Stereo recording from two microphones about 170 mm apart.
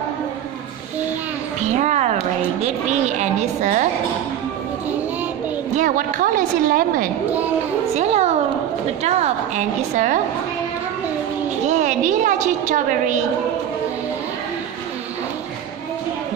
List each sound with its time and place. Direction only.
1.8 s a woman's voice: 40° right (ahead or behind)
5.8 s a woman's voice: 50° right (ahead or behind)
7.9 s a woman's voice: 40° right (ahead or behind)
11.8 s a woman's voice: 45° right (ahead or behind)